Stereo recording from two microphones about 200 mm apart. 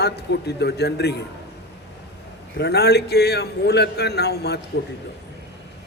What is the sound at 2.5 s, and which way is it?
Speech, 55° left (ahead or behind).